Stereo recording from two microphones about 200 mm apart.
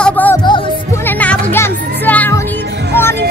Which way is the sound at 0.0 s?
10° left (ahead or behind).